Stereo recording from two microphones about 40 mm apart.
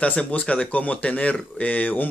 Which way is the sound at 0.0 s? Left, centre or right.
Left.